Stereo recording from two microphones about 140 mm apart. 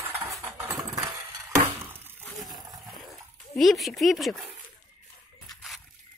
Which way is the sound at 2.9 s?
Centre (ahead or behind).